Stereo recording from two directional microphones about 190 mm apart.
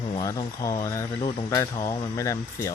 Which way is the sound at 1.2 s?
30° left (ahead or behind).